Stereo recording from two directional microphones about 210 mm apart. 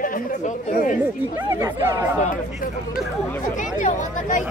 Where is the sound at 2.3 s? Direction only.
40° left (ahead or behind).